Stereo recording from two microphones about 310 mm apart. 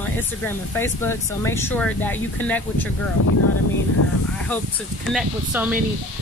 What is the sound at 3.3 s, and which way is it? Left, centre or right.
Speech, left.